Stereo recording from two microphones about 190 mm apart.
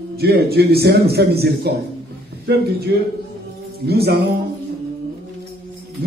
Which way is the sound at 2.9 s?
55° right (ahead or behind).